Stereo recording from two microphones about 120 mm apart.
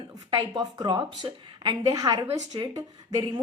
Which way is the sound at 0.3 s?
35° right (ahead or behind).